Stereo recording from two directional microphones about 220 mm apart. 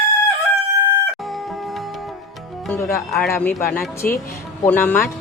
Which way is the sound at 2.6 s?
10° left (ahead or behind).